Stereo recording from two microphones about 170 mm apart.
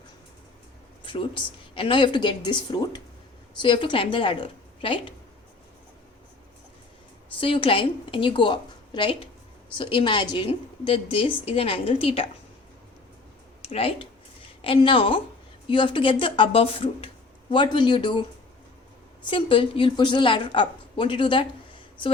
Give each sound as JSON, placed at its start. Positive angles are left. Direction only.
{"t": 1.0, "sound": "a woman's voice", "side_deg": 30}
{"t": 7.3, "sound": "a woman's voice", "side_deg": 30}
{"t": 13.6, "sound": "a woman's voice", "side_deg": 35}
{"t": 19.3, "sound": "a woman's voice", "side_deg": 30}